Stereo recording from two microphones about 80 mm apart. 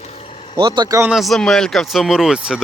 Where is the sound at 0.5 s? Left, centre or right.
Right.